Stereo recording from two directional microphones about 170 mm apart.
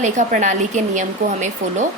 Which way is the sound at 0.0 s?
45° right (ahead or behind).